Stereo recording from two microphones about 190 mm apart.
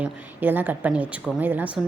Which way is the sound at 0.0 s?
10° right (ahead or behind).